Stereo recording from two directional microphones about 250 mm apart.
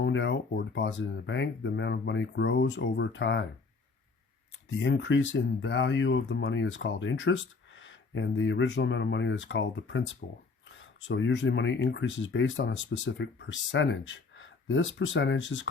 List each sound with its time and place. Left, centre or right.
0.0 s speech: left
4.8 s speech: left